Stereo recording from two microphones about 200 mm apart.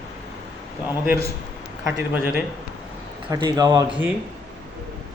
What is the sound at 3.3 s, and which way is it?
Speech, 20° right (ahead or behind).